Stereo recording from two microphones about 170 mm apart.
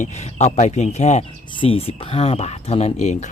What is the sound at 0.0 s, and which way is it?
Speech, 40° left (ahead or behind).